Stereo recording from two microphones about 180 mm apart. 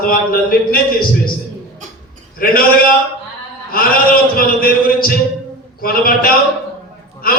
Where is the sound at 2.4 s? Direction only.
50° left (ahead or behind).